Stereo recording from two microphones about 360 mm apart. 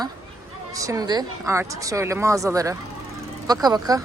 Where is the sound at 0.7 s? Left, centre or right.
Centre.